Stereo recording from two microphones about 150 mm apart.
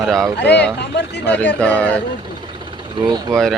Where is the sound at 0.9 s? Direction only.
90° left.